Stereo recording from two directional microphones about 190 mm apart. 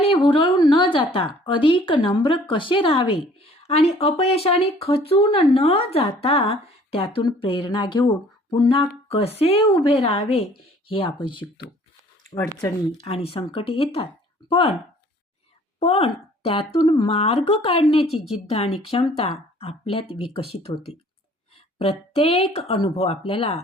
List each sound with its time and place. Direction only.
0.0 s a woman's voice: 30° left (ahead or behind)
13.0 s speech: 30° left (ahead or behind)
15.8 s speech: 30° left (ahead or behind)